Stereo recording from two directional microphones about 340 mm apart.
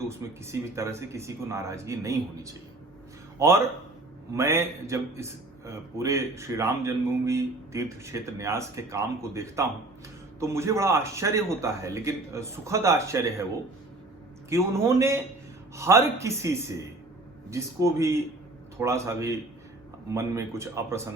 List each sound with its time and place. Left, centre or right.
0.0 s a man's voice: centre
14.5 s a man's voice: centre